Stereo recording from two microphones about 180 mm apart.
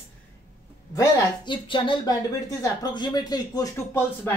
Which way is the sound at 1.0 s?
25° left (ahead or behind).